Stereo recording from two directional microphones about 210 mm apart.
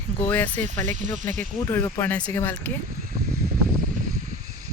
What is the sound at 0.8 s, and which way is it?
Speech, 35° right (ahead or behind).